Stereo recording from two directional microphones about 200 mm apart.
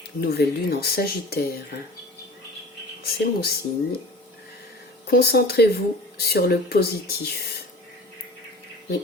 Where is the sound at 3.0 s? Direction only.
50° left (ahead or behind).